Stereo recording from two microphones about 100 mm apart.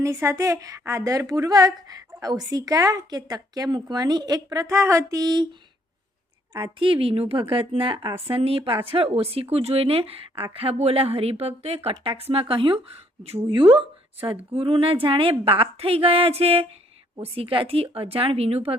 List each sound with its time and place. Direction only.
0.0 s a woman's voice: 30° right (ahead or behind)
6.5 s a woman's voice: 55° right (ahead or behind)
8.3 s speech: 75° right (ahead or behind)
17.2 s speech: 65° right (ahead or behind)